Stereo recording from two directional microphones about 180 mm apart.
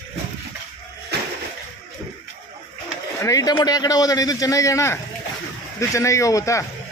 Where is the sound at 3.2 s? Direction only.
20° left (ahead or behind).